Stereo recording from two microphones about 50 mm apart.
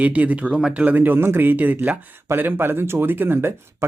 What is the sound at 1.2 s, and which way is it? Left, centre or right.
Speech, right.